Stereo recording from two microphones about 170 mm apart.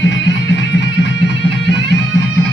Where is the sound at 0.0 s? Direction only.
90° left.